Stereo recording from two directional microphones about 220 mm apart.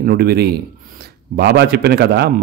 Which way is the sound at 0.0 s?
45° right (ahead or behind).